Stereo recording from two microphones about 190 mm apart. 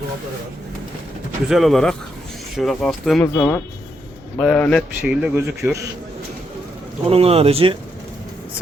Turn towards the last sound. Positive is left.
turn(degrees=-30)  # may be behind; listen again after turning